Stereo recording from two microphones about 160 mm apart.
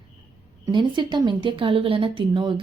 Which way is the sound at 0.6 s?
30° right (ahead or behind).